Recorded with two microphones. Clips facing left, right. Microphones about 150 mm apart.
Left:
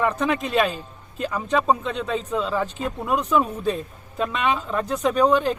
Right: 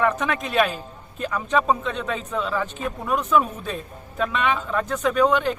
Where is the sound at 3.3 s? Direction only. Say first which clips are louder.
Even; 35° left (ahead or behind).